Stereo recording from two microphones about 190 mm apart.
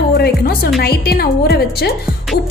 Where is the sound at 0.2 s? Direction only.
55° left (ahead or behind).